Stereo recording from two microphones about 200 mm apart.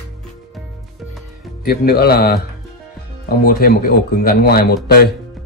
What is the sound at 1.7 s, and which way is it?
Speech, 50° left (ahead or behind).